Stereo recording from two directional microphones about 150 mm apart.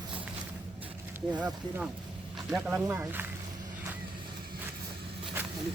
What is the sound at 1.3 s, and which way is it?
Speech, 10° right (ahead or behind).